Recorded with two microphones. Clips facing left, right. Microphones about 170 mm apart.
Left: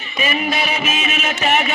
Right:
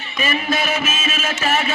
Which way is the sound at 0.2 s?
15° left (ahead or behind).